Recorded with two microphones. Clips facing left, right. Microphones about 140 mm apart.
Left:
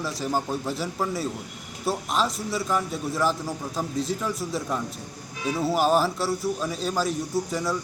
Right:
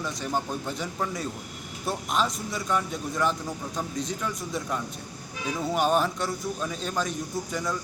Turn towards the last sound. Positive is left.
turn(degrees=5)  # may be behind; listen again after turning